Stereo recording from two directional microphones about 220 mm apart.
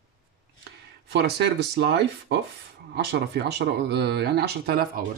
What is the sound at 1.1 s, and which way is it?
Speech, 50° right (ahead or behind).